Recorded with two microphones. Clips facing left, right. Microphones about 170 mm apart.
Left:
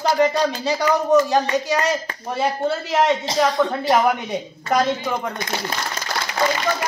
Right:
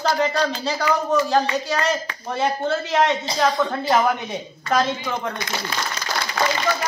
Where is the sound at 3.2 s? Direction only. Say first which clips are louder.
Left 2 dB; 90° left.